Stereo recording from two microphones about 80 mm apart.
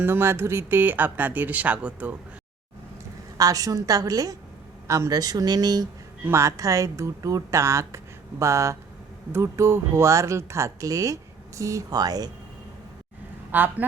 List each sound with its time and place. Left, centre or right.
0.0 s speech: right
3.3 s speech: right
6.3 s speech: right
13.5 s speech: right